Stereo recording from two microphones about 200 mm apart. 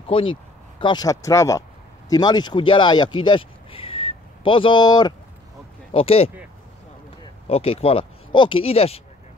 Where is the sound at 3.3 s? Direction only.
25° left (ahead or behind).